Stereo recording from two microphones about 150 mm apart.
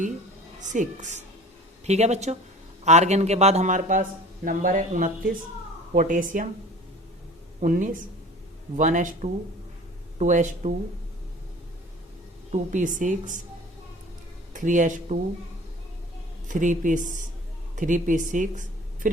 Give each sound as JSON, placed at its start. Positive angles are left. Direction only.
{"t": 0.6, "sound": "a man's voice", "side_deg": -55}
{"t": 7.6, "sound": "speech", "side_deg": -60}
{"t": 12.5, "sound": "speech", "side_deg": -55}
{"t": 14.5, "sound": "speech", "side_deg": -60}
{"t": 16.5, "sound": "speech", "side_deg": -60}